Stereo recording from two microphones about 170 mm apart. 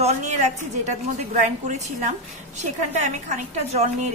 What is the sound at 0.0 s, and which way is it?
A woman's voice, 45° right (ahead or behind).